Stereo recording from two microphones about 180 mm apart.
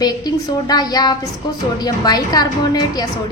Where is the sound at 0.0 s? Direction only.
20° left (ahead or behind).